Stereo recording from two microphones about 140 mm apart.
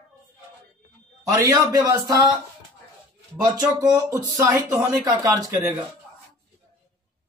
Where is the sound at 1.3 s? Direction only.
25° right (ahead or behind).